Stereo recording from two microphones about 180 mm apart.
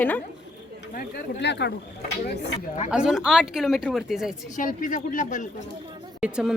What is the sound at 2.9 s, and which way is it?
A woman's voice, 5° right (ahead or behind).